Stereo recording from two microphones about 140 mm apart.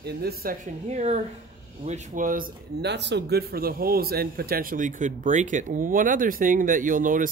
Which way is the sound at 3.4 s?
90° right.